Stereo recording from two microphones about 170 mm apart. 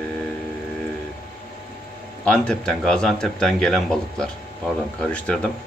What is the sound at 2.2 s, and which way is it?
Speech, 5° left (ahead or behind).